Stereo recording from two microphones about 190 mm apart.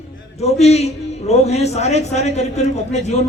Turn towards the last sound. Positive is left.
turn(degrees=35)  # may be behind; listen again after turning